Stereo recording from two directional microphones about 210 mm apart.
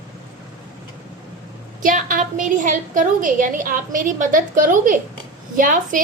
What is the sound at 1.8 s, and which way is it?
A woman's voice, 40° right (ahead or behind).